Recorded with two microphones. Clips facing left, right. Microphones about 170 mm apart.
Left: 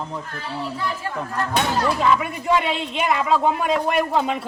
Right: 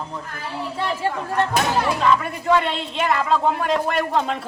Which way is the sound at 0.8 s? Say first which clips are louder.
Right 3 dB; 30° right (ahead or behind).